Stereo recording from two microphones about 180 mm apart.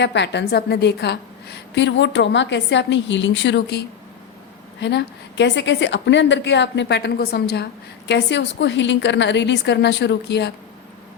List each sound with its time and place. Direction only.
0.0 s a woman's voice: 75° left (ahead or behind)